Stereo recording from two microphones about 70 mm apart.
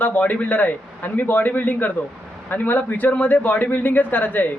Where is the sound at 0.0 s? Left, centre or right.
Left.